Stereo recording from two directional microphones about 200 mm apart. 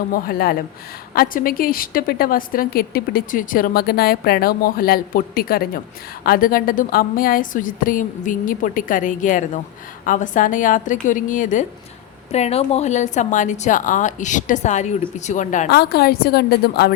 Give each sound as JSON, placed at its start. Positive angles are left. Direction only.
{"t": 0.1, "sound": "a woman's voice", "side_deg": 50}